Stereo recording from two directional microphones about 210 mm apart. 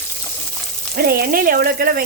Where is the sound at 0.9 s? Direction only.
45° right (ahead or behind).